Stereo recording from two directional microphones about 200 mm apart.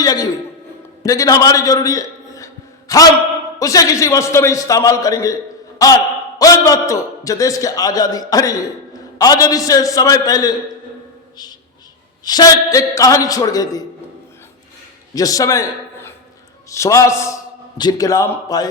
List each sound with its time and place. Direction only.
0.0 s a sound: 20° left (ahead or behind)
3.6 s a man's voice: 15° left (ahead or behind)
6.4 s a man's voice: 15° left (ahead or behind)
12.2 s a man's voice: 20° left (ahead or behind)
15.1 s a man's voice: 15° left (ahead or behind)